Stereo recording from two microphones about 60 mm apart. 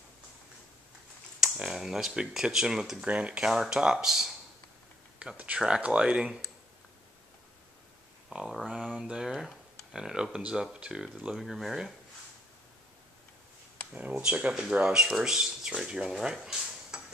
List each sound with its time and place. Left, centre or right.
1.4 s speech: centre
5.4 s speech: centre
8.3 s speech: centre
11.3 s speech: centre
13.9 s speech: right; by 16.3 s centre
16.3 s stir: centre